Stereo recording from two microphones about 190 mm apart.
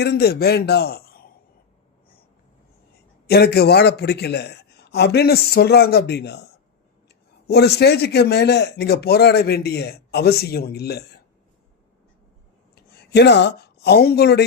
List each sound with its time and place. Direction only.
0.0 s a man's voice: 60° left (ahead or behind)
3.2 s a man's voice: 55° left (ahead or behind)
7.4 s a man's voice: 60° left (ahead or behind)
12.7 s speech: 55° left (ahead or behind)